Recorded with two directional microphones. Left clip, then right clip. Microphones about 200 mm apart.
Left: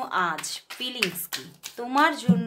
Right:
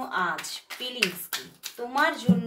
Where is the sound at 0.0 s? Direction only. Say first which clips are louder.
Left 2 dB; 50° left (ahead or behind).